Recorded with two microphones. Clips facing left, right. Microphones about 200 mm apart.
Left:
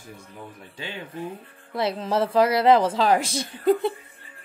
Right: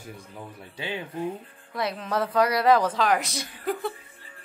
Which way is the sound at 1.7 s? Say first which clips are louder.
Left 4 dB; 25° left (ahead or behind).